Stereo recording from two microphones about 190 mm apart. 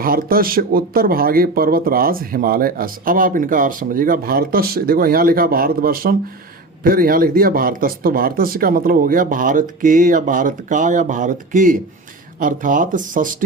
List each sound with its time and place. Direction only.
0.0 s speech: 50° right (ahead or behind)